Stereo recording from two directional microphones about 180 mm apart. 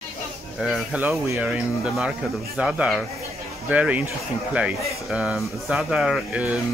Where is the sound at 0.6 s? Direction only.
5° right (ahead or behind).